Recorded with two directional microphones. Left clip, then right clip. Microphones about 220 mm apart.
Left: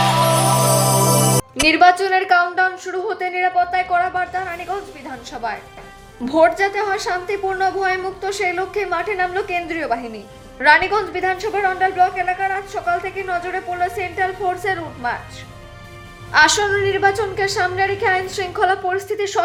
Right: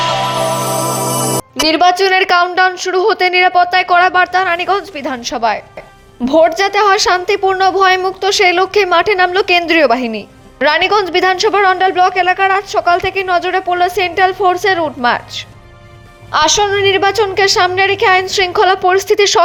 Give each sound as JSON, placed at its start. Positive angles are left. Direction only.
{"t": 0.9, "sound": "music", "side_deg": 0}
{"t": 1.6, "sound": "a woman's voice", "side_deg": -25}
{"t": 16.3, "sound": "a woman's voice", "side_deg": -20}
{"t": 16.7, "sound": "a woman's voice", "side_deg": -35}